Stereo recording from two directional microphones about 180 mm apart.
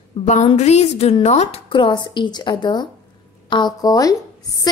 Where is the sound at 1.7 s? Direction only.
25° left (ahead or behind).